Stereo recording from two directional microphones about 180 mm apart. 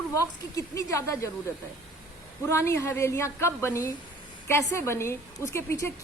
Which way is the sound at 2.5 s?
15° left (ahead or behind).